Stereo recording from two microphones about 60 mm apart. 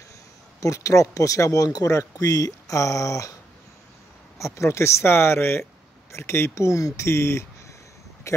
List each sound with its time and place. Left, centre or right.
0.6 s speech: left
4.4 s speech: left